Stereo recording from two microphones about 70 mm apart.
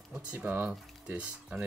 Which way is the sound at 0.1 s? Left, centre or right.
Centre.